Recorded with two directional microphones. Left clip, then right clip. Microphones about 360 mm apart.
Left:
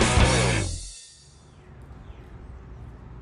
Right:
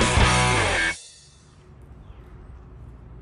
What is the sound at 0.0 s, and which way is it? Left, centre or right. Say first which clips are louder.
Music: right 2 dB; centre.